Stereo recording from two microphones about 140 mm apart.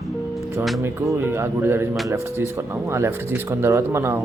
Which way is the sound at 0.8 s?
15° right (ahead or behind).